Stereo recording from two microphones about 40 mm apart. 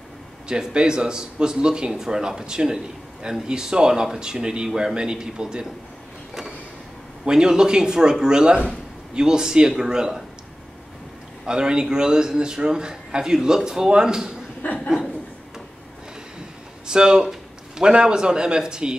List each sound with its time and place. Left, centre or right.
0.5 s a man's voice: right
7.2 s a man's voice: centre
11.4 s a man's voice: right
14.6 s chuckle: left
16.8 s a man's voice: centre